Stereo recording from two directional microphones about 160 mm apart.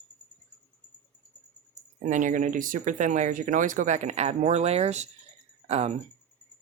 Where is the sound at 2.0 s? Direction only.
55° right (ahead or behind).